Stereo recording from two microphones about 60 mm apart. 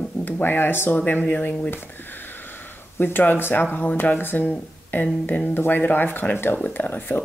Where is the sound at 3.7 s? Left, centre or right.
Left.